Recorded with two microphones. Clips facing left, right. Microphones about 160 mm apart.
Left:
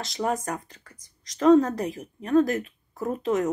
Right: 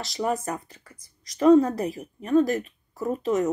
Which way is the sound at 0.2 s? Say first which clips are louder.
Right 1 dB; 45° left (ahead or behind).